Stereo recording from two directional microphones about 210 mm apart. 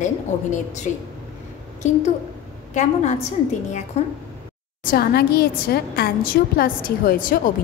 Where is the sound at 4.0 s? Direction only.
30° left (ahead or behind).